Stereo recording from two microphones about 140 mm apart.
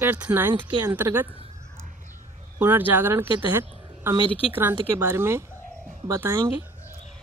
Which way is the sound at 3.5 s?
15° right (ahead or behind).